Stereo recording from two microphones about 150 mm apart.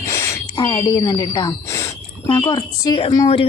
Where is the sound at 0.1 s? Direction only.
20° left (ahead or behind).